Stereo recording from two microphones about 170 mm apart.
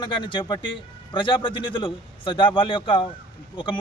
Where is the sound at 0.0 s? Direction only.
30° left (ahead or behind).